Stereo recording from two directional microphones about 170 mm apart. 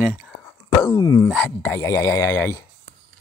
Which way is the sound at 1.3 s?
5° left (ahead or behind).